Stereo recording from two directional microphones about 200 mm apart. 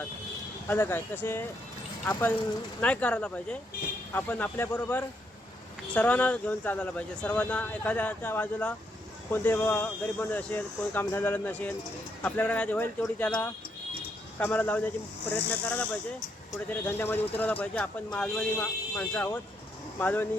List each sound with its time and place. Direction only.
0.7 s speech: 10° left (ahead or behind)
2.8 s speech: 5° left (ahead or behind)